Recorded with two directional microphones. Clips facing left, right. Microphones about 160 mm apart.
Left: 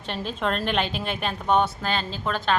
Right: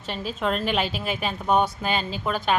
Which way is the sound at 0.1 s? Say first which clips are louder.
Right 1 dB; 5° right (ahead or behind).